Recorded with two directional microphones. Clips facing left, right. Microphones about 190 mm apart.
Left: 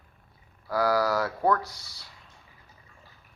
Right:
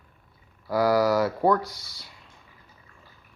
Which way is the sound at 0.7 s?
5° right (ahead or behind).